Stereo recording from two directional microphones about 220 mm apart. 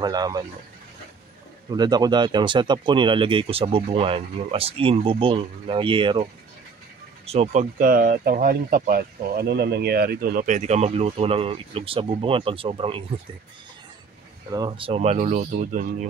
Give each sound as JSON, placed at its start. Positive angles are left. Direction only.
{"t": 0.0, "sound": "speech", "side_deg": -20}
{"t": 1.7, "sound": "speech", "side_deg": -20}
{"t": 7.2, "sound": "speech", "side_deg": -30}
{"t": 14.5, "sound": "speech", "side_deg": -20}